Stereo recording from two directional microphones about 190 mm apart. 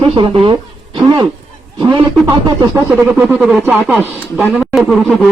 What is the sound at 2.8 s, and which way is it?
A man's voice, 10° right (ahead or behind).